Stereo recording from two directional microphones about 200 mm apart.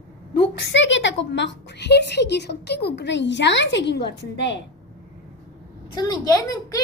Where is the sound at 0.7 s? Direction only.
65° left (ahead or behind).